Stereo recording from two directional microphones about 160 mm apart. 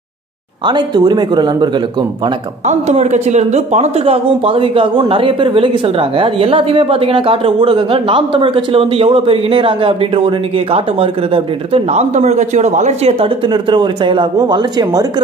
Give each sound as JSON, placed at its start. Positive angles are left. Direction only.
{"t": 0.7, "sound": "speech", "side_deg": -25}
{"t": 2.6, "sound": "speech", "side_deg": -50}
{"t": 13.5, "sound": "speech", "side_deg": -30}